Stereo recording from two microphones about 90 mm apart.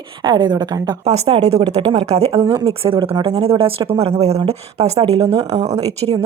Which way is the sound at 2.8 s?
80° right.